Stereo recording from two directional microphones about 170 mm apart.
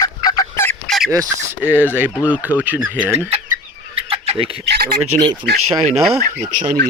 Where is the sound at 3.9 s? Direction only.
35° right (ahead or behind).